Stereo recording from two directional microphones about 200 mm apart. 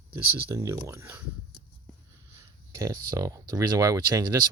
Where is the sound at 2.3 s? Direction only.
15° right (ahead or behind).